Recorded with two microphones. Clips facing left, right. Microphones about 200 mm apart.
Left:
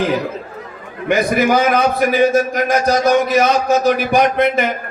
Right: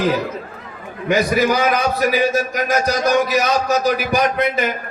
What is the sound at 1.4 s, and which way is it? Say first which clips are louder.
A man's voice: left 3 dB; 50° left (ahead or behind).